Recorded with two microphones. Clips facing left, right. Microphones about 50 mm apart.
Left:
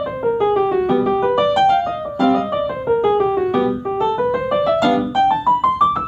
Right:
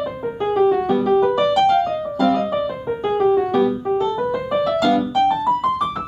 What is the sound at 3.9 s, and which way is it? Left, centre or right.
Music, left.